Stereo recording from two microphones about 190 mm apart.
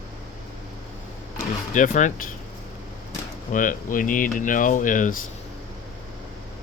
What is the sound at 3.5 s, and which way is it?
Speech, 45° left (ahead or behind).